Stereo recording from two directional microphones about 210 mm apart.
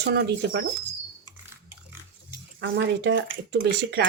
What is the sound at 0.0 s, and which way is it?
Speech, 50° right (ahead or behind).